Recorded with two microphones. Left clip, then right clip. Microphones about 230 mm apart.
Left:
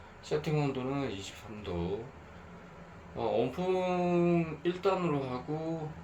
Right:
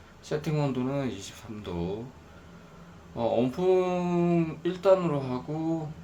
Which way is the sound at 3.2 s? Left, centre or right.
Right.